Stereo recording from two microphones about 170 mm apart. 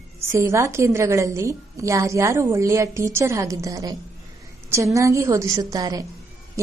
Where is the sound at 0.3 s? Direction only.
15° right (ahead or behind).